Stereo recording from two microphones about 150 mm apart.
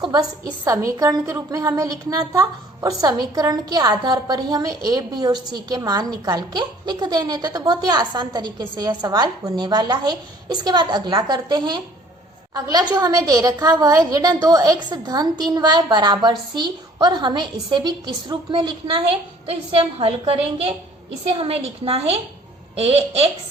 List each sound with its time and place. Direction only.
0.0 s a woman's voice: 25° right (ahead or behind); by 23.3 s 40° right (ahead or behind)